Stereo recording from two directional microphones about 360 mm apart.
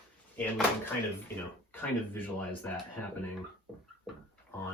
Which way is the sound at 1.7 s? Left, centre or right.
Centre.